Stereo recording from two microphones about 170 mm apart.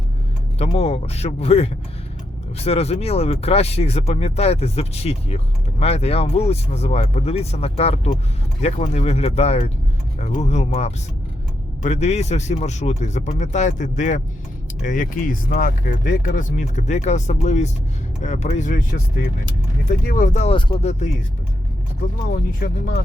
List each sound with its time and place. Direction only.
0.6 s speech: 35° left (ahead or behind)
20.6 s speech: 30° left (ahead or behind)
22.3 s speech: 55° left (ahead or behind)